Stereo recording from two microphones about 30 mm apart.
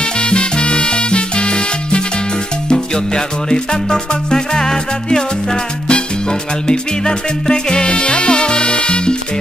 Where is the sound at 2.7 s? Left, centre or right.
Left.